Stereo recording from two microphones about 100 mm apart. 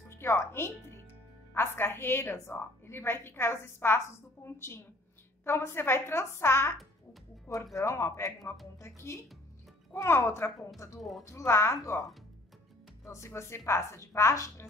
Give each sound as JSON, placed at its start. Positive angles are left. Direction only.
{"t": 0.1, "sound": "a woman's voice", "side_deg": 25}
{"t": 11.0, "sound": "speech", "side_deg": 0}
{"t": 11.2, "sound": "a woman's voice", "side_deg": 30}
{"t": 13.0, "sound": "a woman's voice", "side_deg": 30}